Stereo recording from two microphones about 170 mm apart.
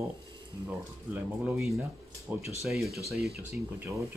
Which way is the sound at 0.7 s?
10° right (ahead or behind).